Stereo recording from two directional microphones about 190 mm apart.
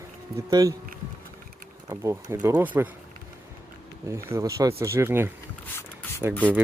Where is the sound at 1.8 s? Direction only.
15° right (ahead or behind).